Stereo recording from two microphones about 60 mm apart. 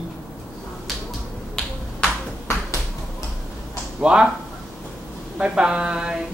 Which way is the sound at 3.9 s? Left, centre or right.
Centre.